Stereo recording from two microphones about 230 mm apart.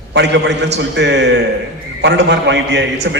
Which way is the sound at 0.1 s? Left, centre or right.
Right.